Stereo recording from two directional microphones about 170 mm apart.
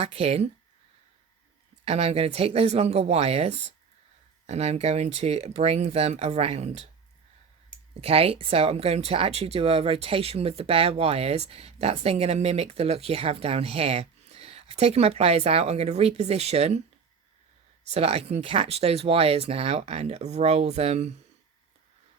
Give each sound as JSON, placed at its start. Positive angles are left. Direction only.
{"t": 0.0, "sound": "speech", "side_deg": -40}
{"t": 1.8, "sound": "speech", "side_deg": -35}
{"t": 8.0, "sound": "speech", "side_deg": -35}
{"t": 17.8, "sound": "speech", "side_deg": -40}